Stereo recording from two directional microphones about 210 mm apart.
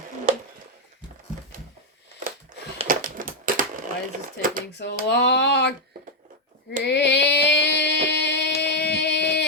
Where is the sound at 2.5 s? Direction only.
40° right (ahead or behind).